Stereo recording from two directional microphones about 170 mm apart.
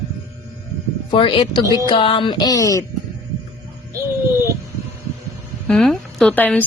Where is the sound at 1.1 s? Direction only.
30° left (ahead or behind).